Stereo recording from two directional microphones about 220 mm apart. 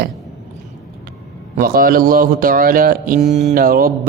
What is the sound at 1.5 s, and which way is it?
A man's voice, 40° right (ahead or behind).